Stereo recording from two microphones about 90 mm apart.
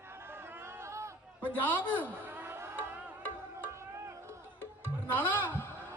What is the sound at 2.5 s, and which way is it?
Music, 25° right (ahead or behind).